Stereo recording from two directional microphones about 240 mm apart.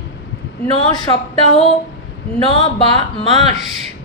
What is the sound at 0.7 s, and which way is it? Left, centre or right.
Speech, centre.